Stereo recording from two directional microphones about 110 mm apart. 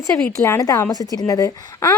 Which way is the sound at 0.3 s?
25° left (ahead or behind).